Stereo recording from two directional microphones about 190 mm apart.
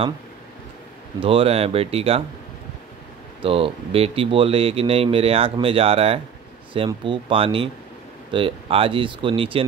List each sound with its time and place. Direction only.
1.2 s speech: 30° right (ahead or behind)
3.4 s speech: 30° right (ahead or behind)